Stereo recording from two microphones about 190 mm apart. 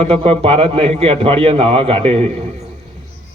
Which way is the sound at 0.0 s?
30° right (ahead or behind).